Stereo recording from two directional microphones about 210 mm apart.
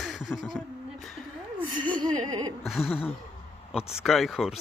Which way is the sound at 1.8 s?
20° right (ahead or behind).